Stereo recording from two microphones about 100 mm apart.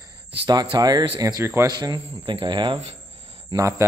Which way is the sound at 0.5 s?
45° right (ahead or behind).